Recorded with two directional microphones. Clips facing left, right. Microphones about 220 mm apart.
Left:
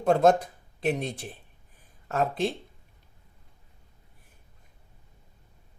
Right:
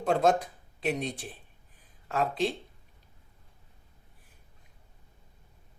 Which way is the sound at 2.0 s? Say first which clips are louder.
Left 2 dB; 50° left (ahead or behind).